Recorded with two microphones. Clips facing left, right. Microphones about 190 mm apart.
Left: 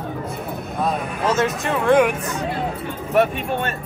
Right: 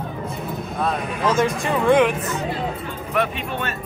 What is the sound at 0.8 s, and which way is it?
Speech, 5° left (ahead or behind).